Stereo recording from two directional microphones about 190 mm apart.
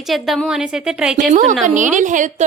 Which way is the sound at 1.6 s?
40° right (ahead or behind).